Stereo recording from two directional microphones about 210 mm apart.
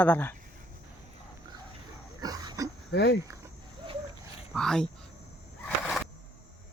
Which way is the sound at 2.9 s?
50° left (ahead or behind).